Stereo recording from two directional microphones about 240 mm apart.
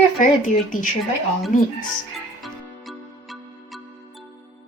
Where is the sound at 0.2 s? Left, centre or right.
Left.